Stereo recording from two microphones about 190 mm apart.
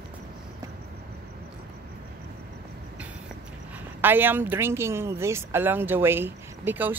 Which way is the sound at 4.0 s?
10° right (ahead or behind).